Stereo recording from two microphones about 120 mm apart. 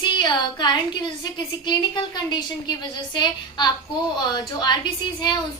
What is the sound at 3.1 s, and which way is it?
A woman's voice, 40° left (ahead or behind).